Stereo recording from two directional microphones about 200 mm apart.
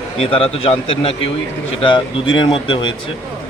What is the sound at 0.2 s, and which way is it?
A man's voice, 25° left (ahead or behind).